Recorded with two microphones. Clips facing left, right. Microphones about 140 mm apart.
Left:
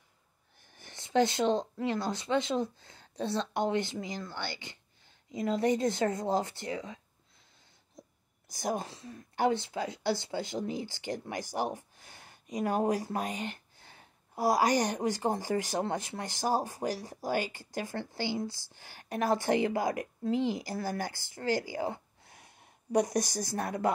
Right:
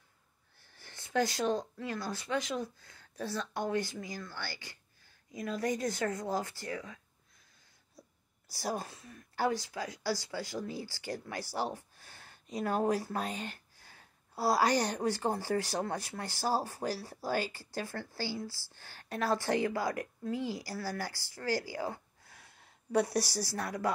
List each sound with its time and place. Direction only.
0.6 s speech: 20° left (ahead or behind)
8.5 s speech: 20° left (ahead or behind)